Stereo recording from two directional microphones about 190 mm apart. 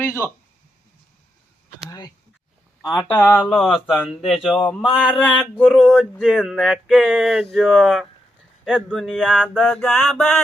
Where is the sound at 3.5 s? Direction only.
Centre (ahead or behind).